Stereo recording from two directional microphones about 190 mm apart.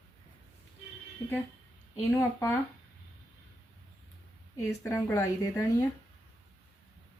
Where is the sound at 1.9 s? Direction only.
15° left (ahead or behind).